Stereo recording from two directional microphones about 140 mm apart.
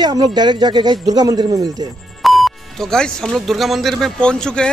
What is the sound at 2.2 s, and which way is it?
Speech, centre (ahead or behind).